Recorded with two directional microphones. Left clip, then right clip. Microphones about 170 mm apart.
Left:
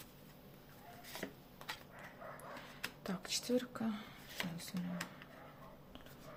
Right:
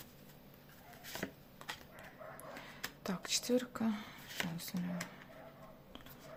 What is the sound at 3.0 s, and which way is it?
Speech, 20° right (ahead or behind).